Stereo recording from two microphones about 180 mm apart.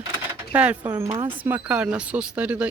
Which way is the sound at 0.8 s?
20° right (ahead or behind).